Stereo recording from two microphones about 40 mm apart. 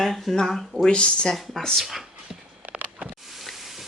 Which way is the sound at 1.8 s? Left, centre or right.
Centre.